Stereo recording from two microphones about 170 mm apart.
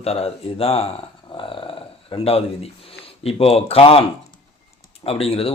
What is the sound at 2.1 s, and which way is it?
A man's voice, 35° left (ahead or behind).